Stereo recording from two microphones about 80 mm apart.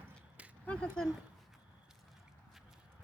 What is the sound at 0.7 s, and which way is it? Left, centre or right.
Speech, centre.